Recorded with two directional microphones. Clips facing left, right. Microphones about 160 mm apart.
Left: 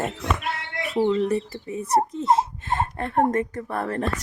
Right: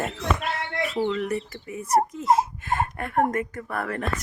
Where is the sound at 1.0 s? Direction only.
25° left (ahead or behind).